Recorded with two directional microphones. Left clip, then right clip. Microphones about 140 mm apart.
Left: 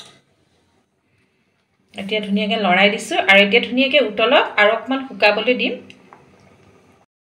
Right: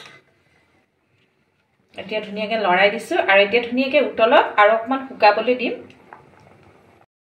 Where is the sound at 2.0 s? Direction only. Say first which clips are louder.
Left 3 dB; 20° left (ahead or behind).